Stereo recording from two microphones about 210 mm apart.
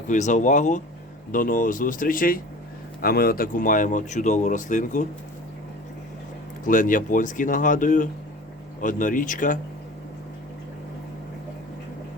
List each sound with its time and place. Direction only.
0.1 s speech: 35° left (ahead or behind)
6.7 s speech: 40° left (ahead or behind)